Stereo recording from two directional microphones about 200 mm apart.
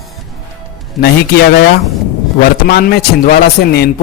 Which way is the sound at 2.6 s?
50° left (ahead or behind).